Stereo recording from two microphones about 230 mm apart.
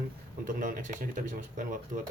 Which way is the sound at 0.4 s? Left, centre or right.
Right.